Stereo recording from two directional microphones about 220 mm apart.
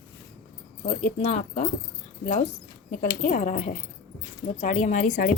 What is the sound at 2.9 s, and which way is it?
Speech, 40° left (ahead or behind).